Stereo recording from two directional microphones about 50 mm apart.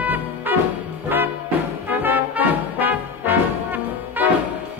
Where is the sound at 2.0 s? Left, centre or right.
Right.